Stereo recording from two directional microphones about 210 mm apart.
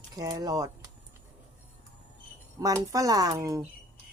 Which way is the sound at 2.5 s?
15° right (ahead or behind).